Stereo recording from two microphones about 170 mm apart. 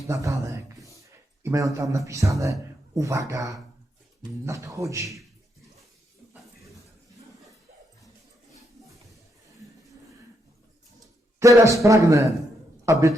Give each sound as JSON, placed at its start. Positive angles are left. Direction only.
{"t": 0.1, "sound": "a sound", "side_deg": -20}
{"t": 1.0, "sound": "a man's voice", "side_deg": -15}
{"t": 11.3, "sound": "a man's voice", "side_deg": -20}